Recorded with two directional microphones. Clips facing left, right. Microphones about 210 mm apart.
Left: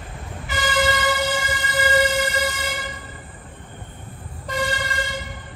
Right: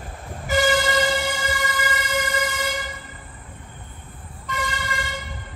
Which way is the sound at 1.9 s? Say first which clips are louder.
Left 5 dB; 30° left (ahead or behind).